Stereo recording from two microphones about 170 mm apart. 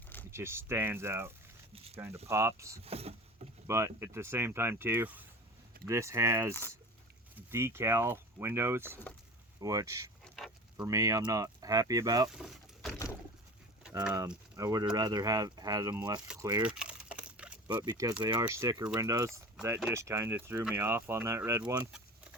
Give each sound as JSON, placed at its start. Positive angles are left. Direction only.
{"t": 0.3, "sound": "speech", "side_deg": -15}
{"t": 1.7, "sound": "a sound", "side_deg": -35}
{"t": 2.3, "sound": "speech", "side_deg": -15}
{"t": 2.8, "sound": "vehicle", "side_deg": -35}
{"t": 3.7, "sound": "speech", "side_deg": -15}
{"t": 6.5, "sound": "speech", "side_deg": 15}
{"t": 7.3, "sound": "speech", "side_deg": -15}
{"t": 10.2, "sound": "a sound", "side_deg": 0}
{"t": 10.8, "sound": "speech", "side_deg": -20}
{"t": 12.4, "sound": "vehicle", "side_deg": 0}
{"t": 14.0, "sound": "speech", "side_deg": -10}
{"t": 16.6, "sound": "typing", "side_deg": -5}
{"t": 17.7, "sound": "speech", "side_deg": -20}